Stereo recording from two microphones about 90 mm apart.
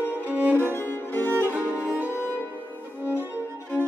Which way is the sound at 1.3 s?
20° right (ahead or behind).